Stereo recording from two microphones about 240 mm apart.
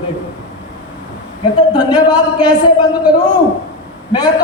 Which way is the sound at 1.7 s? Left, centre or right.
Centre.